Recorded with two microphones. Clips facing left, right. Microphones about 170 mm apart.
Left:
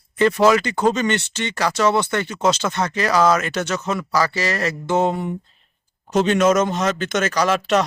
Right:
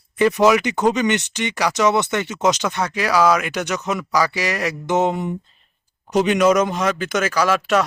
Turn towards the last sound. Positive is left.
turn(degrees=-5)  # may be behind; listen again after turning